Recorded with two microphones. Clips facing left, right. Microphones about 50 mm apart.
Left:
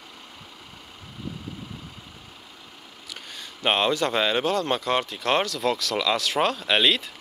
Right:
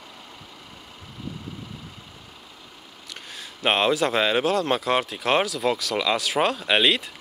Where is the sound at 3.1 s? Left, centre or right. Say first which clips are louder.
Even; centre.